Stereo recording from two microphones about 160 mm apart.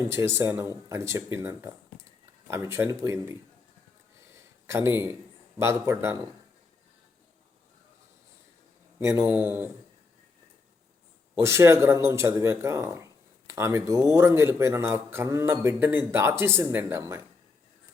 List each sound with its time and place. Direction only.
0.1 s speech: 15° right (ahead or behind)
4.3 s a sound: 15° right (ahead or behind)
5.5 s speech: 15° right (ahead or behind)
9.0 s speech: 15° right (ahead or behind)
11.3 s speech: 15° right (ahead or behind)